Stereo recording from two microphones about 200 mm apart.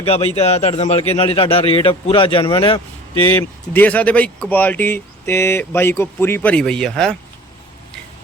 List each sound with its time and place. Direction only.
0.0 s a man's voice: 30° left (ahead or behind)
3.2 s speech: 10° left (ahead or behind)